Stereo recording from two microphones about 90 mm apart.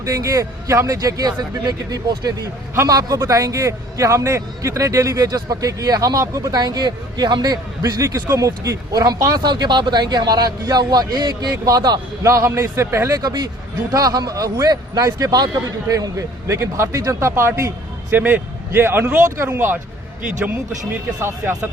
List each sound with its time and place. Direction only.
0.0 s a man's voice: 40° right (ahead or behind)
12.2 s a man's voice: 35° right (ahead or behind)
13.1 s a man's voice: 50° right (ahead or behind); by 17.7 s 30° right (ahead or behind)
18.1 s speech: 20° right (ahead or behind)
21.2 s a man's voice: 30° right (ahead or behind)